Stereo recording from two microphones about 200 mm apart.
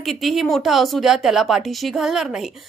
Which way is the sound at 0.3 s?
Centre (ahead or behind).